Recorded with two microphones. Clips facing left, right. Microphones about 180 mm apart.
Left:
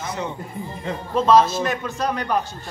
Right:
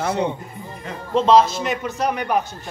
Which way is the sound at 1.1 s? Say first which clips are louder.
Right 1 dB; 20° right (ahead or behind).